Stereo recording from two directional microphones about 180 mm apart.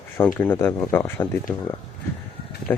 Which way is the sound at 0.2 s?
10° left (ahead or behind).